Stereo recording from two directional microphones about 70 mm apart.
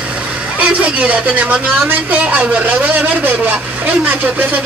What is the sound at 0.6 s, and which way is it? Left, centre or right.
Speech, right.